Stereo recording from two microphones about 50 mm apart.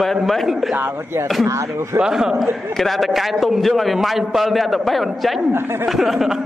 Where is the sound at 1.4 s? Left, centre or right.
Right.